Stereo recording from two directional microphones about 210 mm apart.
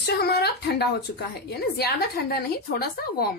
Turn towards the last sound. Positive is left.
turn(degrees=45)  # may be behind; listen again after turning